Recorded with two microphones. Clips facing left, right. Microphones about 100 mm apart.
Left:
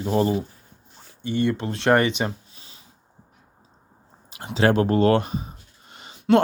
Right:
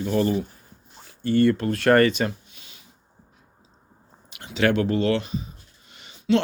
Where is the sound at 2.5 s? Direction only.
35° left (ahead or behind).